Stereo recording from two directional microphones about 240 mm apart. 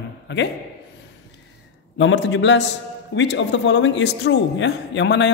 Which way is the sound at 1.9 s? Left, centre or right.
Left.